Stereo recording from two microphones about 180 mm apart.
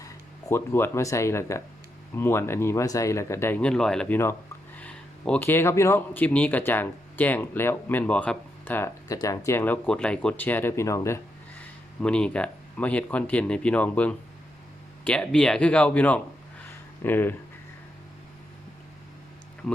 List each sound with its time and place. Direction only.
0.0 s speech: 15° left (ahead or behind)
12.0 s speech: 5° left (ahead or behind)